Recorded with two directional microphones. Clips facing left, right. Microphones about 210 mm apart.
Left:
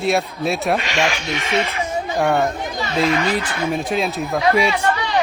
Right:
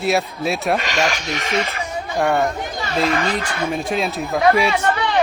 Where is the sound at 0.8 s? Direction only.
40° right (ahead or behind).